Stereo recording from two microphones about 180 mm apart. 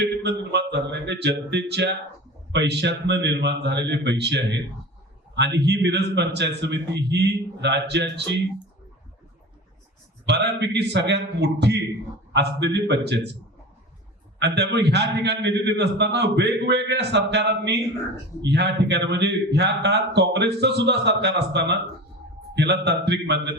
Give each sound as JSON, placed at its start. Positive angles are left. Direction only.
{"t": 0.0, "sound": "a sound", "side_deg": -70}
{"t": 2.5, "sound": "a man's voice", "side_deg": -70}
{"t": 10.2, "sound": "a man's voice", "side_deg": -70}
{"t": 14.3, "sound": "a man's voice", "side_deg": -70}